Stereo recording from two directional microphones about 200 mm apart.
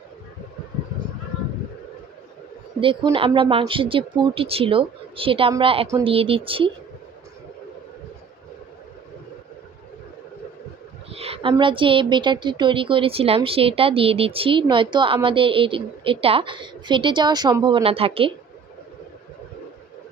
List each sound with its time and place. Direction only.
2.8 s a woman's voice: 25° right (ahead or behind)
11.1 s a woman's voice: 30° right (ahead or behind)